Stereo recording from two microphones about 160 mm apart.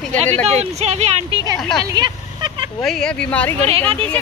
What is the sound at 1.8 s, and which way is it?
Speech, 25° right (ahead or behind).